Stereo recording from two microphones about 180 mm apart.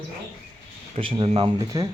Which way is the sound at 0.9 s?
30° right (ahead or behind).